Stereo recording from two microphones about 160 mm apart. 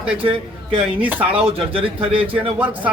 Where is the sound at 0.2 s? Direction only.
35° right (ahead or behind).